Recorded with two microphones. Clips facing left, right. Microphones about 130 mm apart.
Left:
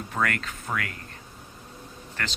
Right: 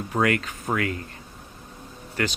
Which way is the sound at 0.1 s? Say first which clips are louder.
Right 6 dB; 20° right (ahead or behind).